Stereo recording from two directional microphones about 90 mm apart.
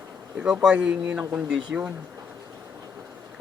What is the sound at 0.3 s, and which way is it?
A man's voice, 10° right (ahead or behind).